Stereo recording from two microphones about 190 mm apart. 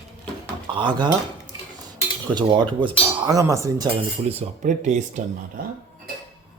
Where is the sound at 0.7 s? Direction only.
25° right (ahead or behind).